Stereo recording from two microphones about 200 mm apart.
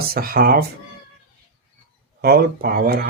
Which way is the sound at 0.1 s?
50° right (ahead or behind).